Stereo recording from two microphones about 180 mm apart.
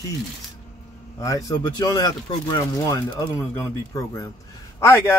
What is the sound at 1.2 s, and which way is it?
Speech, 20° left (ahead or behind).